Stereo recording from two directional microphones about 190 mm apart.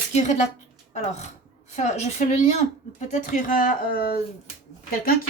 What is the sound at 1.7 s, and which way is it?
Speech, 35° left (ahead or behind).